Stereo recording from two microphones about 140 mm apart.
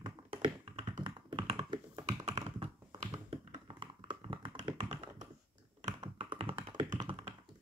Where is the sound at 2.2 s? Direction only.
55° right (ahead or behind).